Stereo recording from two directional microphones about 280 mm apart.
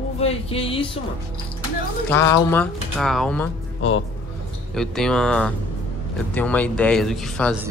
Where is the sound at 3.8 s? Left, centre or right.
Left.